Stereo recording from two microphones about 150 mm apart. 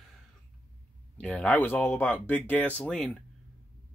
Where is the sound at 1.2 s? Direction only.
5° left (ahead or behind).